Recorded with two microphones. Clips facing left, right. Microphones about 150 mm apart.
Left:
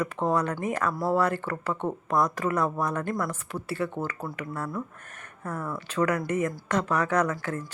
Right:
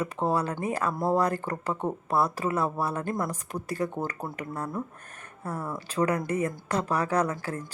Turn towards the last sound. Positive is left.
turn(degrees=-35)  # may be behind; listen again after turning